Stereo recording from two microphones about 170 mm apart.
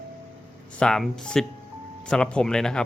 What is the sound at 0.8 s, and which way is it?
Speech, centre (ahead or behind).